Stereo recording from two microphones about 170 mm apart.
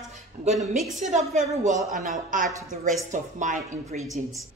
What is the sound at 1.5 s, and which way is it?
A woman's voice, 45° right (ahead or behind).